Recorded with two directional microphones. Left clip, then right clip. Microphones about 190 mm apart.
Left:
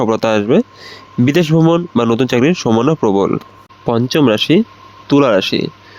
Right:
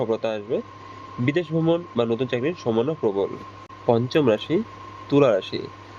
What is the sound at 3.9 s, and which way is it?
Speech, 55° left (ahead or behind).